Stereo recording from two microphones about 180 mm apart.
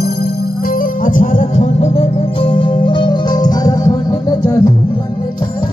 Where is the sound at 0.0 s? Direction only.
60° left (ahead or behind); by 4.2 s 20° left (ahead or behind).